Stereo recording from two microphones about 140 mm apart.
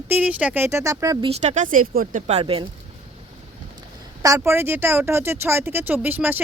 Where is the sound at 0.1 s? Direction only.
10° right (ahead or behind).